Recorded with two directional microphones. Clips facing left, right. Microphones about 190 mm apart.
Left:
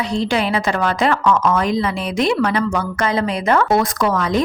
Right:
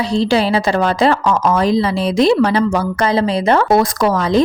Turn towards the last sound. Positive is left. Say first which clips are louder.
# right 4 dB
turn(degrees=-30)  # may be behind; listen again after turning